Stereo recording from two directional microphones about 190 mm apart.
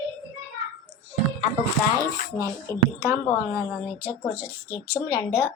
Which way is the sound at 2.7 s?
15° left (ahead or behind).